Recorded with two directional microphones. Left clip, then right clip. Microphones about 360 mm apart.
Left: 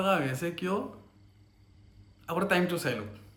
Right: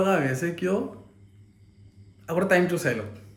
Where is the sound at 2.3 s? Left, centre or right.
Centre.